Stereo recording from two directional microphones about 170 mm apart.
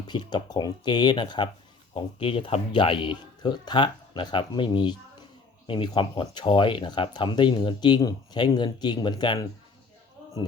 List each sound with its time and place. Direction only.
0.1 s speech: 25° left (ahead or behind)